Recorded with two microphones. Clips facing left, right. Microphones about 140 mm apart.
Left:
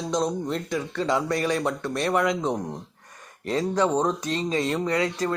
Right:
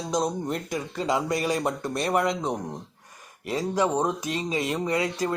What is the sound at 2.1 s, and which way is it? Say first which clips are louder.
Speech: left 1 dB; centre (ahead or behind).